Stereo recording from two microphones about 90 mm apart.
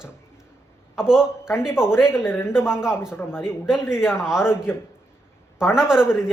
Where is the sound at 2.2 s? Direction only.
25° left (ahead or behind).